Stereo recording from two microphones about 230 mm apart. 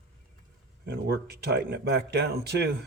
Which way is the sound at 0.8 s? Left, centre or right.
Right.